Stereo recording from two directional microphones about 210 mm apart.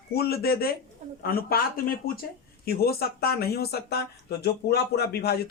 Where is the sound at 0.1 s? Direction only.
50° left (ahead or behind).